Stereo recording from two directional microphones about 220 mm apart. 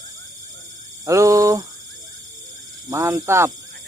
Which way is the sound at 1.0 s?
15° right (ahead or behind).